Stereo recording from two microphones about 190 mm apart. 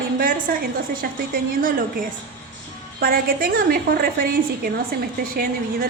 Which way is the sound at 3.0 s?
50° right (ahead or behind).